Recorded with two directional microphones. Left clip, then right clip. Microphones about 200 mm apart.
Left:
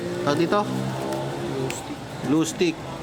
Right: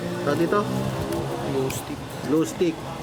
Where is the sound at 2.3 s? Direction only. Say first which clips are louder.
Even; 35° left (ahead or behind).